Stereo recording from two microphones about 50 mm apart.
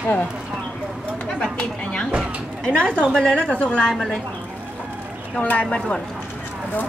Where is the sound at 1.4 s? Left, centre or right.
Left.